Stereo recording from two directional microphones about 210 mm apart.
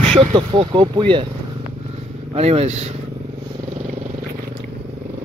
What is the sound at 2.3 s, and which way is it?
Speech, 30° right (ahead or behind).